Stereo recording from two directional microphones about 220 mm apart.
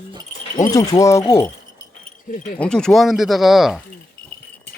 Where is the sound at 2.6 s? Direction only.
5° left (ahead or behind).